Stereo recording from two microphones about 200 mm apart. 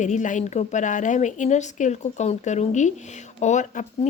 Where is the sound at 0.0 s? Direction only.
40° left (ahead or behind).